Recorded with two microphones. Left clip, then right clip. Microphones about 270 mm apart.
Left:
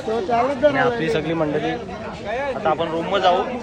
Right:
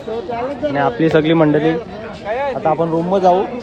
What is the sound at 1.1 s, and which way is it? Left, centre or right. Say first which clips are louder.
Speech: right 9 dB; right.